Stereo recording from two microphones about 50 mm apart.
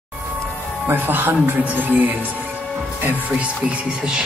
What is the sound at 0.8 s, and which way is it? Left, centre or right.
Speech, right.